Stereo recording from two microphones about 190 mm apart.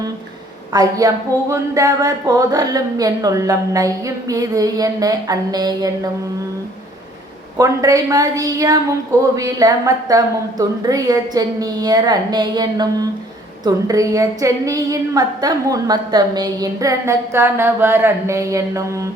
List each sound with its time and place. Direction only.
0.7 s speech: 20° right (ahead or behind)
7.6 s a woman's voice: 15° right (ahead or behind)